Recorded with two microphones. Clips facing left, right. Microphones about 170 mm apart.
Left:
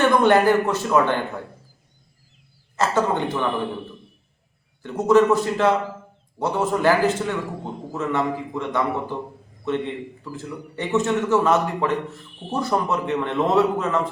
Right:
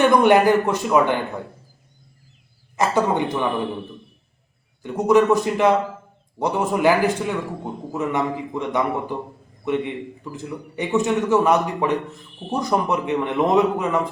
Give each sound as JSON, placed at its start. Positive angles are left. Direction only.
{"t": 0.0, "sound": "a man's voice", "side_deg": -15}
{"t": 2.7, "sound": "a man's voice", "side_deg": -15}
{"t": 4.8, "sound": "a man's voice", "side_deg": -15}